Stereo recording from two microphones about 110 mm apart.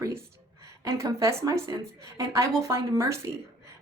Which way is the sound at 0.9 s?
30° right (ahead or behind).